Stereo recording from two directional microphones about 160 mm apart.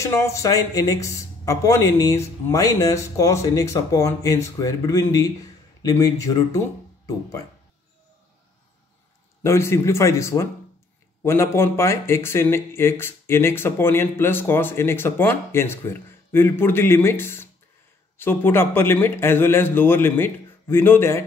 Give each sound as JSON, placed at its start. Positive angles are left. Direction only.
{"t": 0.0, "sound": "speech", "side_deg": 20}
{"t": 9.4, "sound": "speech", "side_deg": 15}